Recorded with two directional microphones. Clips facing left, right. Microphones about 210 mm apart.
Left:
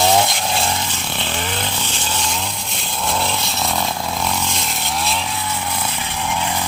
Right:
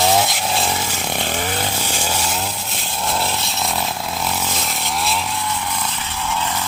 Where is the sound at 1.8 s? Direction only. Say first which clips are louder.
Right 3 dB; 10° right (ahead or behind).